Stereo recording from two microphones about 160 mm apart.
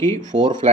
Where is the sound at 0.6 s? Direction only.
45° right (ahead or behind).